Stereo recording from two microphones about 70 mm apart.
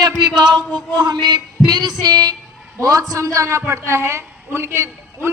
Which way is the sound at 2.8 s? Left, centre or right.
Right.